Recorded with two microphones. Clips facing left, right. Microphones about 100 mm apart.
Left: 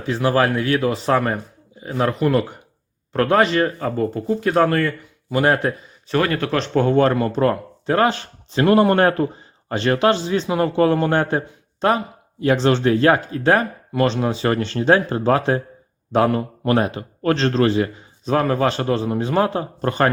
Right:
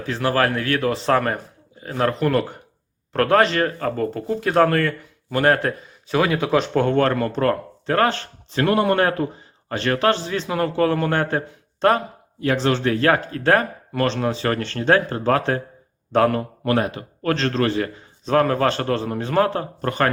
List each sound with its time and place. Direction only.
0.0 s speech: 15° left (ahead or behind)
6.1 s speech: 5° right (ahead or behind)
6.8 s speech: 10° left (ahead or behind)
8.6 s speech: 35° left (ahead or behind)
9.6 s a man's voice: 25° left (ahead or behind)
11.8 s speech: 5° left (ahead or behind)
12.6 s speech: 25° left (ahead or behind)
16.6 s a man's voice: 30° left (ahead or behind)
18.3 s speech: 5° left (ahead or behind); by 20.1 s 25° left (ahead or behind)